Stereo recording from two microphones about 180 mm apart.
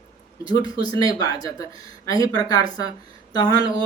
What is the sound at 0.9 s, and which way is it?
Speech, 20° left (ahead or behind).